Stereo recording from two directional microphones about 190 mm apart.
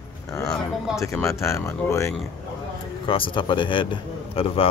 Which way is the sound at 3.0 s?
25° left (ahead or behind).